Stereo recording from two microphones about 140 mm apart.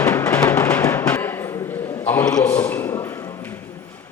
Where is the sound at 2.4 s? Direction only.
15° left (ahead or behind).